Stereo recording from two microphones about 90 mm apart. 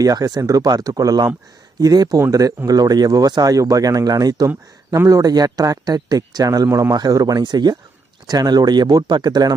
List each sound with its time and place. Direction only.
0.0 s speech: 45° right (ahead or behind)